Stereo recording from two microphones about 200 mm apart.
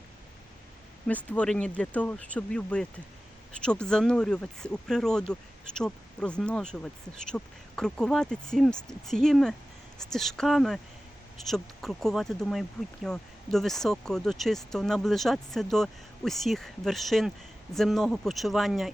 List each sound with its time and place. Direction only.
1.0 s speech: 5° left (ahead or behind)